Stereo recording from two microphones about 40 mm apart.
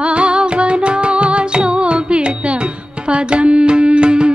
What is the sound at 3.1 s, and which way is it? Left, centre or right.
Music, right.